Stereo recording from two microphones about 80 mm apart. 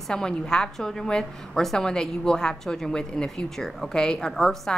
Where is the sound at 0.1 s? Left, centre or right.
Centre.